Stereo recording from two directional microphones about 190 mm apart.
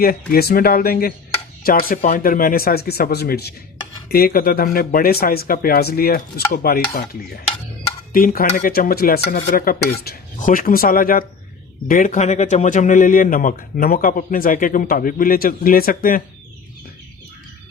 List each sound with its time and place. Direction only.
0.0 s speech: 50° left (ahead or behind)